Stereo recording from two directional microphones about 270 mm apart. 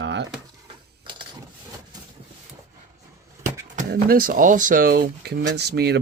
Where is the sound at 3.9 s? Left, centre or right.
Right.